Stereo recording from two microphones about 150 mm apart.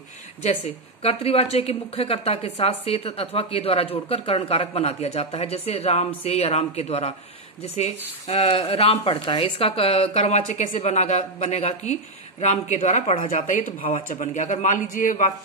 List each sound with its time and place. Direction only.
1.0 s a woman's voice: 40° left (ahead or behind); by 15.3 s 60° left (ahead or behind)